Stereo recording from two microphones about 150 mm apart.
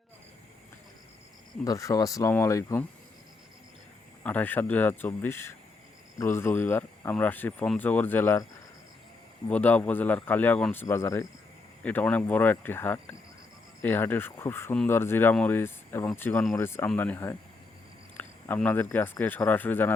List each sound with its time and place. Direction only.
1.6 s speech: 20° left (ahead or behind)
4.2 s speech: 10° left (ahead or behind)
9.5 s speech: 10° left (ahead or behind)